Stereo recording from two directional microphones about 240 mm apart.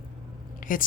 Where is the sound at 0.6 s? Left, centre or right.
Left.